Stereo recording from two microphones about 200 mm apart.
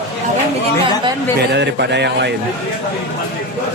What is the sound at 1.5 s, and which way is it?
Speech, 60° right (ahead or behind).